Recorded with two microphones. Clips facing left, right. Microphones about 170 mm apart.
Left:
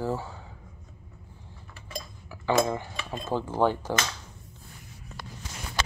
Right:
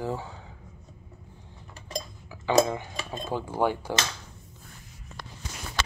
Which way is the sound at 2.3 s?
20° right (ahead or behind).